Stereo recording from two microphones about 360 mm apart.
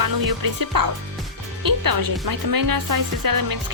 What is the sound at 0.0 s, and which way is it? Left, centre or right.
Speech, right.